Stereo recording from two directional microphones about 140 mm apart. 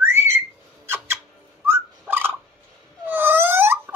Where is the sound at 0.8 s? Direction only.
15° right (ahead or behind).